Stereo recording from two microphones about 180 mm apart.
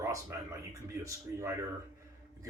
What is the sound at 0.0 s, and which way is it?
Speech, 15° right (ahead or behind).